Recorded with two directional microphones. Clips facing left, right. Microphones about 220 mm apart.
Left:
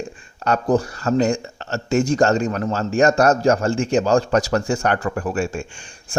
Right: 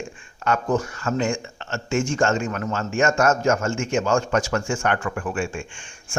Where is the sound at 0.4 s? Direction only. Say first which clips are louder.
Left 4 dB; 35° left (ahead or behind).